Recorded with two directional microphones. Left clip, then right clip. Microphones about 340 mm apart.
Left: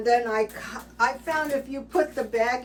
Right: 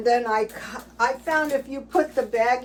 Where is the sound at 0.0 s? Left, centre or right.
Centre.